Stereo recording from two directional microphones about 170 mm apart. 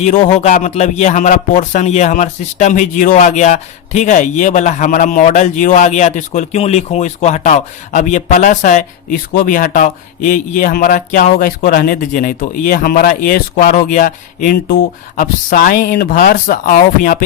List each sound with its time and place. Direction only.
0.0 s a man's voice: 45° left (ahead or behind)
11.3 s a man's voice: 65° left (ahead or behind)